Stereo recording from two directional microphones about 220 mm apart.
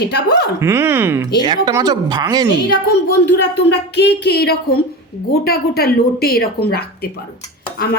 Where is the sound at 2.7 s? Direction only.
50° left (ahead or behind).